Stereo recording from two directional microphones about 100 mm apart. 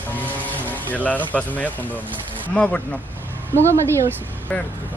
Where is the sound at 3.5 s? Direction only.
25° right (ahead or behind).